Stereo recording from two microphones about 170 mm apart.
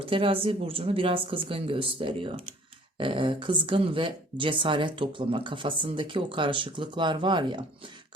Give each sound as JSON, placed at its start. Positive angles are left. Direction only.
{"t": 0.0, "sound": "speech", "side_deg": -30}